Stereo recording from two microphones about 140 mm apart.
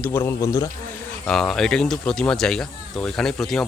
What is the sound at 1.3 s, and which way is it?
Speech, 5° left (ahead or behind).